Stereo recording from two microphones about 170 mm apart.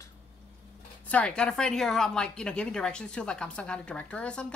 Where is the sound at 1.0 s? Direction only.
5° left (ahead or behind).